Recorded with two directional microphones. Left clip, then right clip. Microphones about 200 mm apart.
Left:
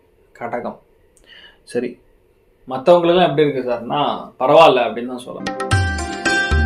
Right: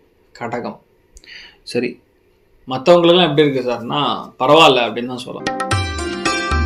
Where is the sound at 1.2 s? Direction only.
25° right (ahead or behind).